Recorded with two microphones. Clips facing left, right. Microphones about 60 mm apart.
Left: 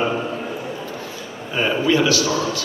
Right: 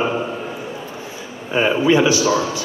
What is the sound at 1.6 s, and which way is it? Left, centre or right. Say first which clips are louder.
Speech: right 3 dB; centre.